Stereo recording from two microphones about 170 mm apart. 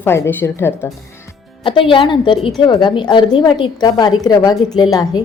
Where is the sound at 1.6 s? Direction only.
30° left (ahead or behind).